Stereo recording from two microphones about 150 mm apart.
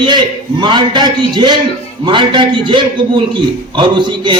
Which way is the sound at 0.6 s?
30° right (ahead or behind).